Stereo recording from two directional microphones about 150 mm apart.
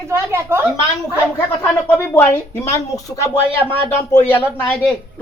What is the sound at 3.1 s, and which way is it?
A woman's voice, 20° left (ahead or behind).